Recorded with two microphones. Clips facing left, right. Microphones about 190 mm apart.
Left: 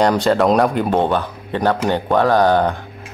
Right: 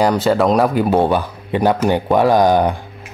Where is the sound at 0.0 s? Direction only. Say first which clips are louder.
Even; 5° right (ahead or behind).